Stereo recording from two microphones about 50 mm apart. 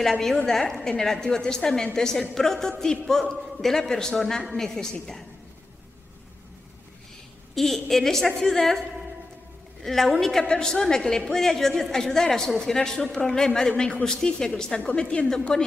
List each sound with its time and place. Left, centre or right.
0.5 s a woman's voice: centre
0.7 s a woman's voice: centre
7.5 s a woman's voice: centre
9.8 s a woman's voice: centre